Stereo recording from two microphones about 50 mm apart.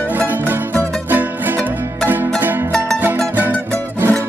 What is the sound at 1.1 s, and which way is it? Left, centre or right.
Music, right.